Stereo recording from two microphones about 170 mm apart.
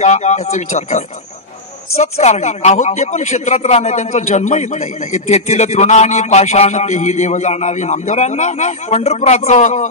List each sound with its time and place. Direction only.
0.0 s a man's voice: 45° left (ahead or behind)